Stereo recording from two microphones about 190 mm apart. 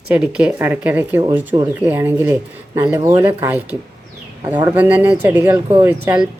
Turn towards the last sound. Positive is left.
turn(degrees=-10)  # may be behind; listen again after turning